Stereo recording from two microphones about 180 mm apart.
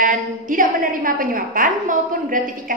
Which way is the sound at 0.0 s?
50° right (ahead or behind).